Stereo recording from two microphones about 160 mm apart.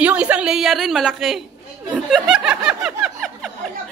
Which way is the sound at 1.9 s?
5° right (ahead or behind).